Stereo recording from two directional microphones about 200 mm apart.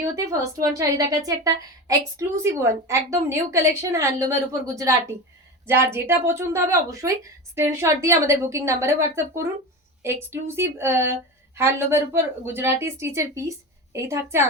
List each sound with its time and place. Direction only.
0.0 s a woman's voice: 15° right (ahead or behind)